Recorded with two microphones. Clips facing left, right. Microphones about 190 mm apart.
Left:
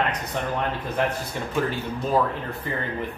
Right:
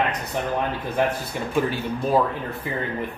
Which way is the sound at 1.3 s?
10° right (ahead or behind).